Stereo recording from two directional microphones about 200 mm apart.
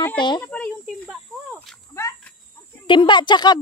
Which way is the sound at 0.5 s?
Centre (ahead or behind).